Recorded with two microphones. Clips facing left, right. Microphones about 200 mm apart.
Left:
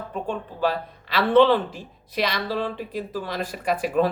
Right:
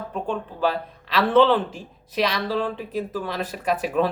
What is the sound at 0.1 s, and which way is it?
Speech, 5° left (ahead or behind).